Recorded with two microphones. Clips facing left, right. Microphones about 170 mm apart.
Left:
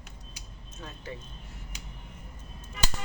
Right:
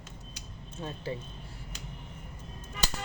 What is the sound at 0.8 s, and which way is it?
Speech, 30° right (ahead or behind).